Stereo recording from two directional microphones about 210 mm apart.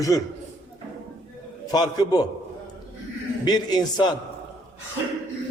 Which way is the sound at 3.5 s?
20° left (ahead or behind).